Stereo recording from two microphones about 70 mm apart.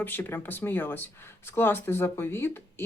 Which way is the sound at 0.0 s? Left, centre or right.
Left.